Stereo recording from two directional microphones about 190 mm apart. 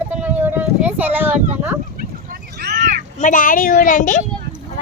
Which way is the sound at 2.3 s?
50° right (ahead or behind).